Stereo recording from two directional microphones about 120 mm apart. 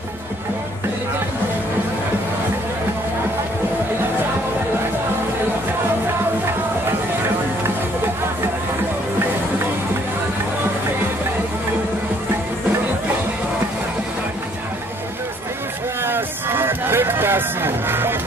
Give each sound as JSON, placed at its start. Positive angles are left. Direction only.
{"t": 16.0, "sound": "run", "side_deg": -20}